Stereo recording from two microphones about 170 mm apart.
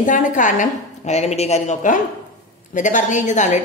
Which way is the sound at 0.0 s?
50° left (ahead or behind).